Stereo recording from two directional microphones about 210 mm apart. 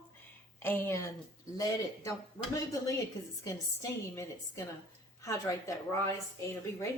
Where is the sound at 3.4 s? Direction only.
15° left (ahead or behind).